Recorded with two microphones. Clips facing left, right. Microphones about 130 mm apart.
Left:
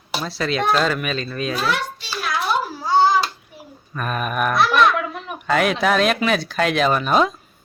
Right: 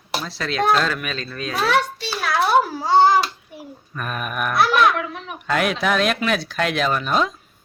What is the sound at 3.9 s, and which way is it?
Speech, centre (ahead or behind).